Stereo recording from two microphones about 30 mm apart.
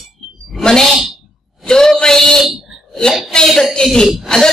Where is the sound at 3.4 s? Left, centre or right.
Centre.